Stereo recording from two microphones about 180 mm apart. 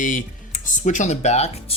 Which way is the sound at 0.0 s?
45° left (ahead or behind).